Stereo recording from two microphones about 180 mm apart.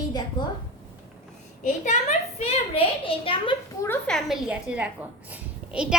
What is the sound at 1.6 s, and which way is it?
A child's voice, 40° left (ahead or behind).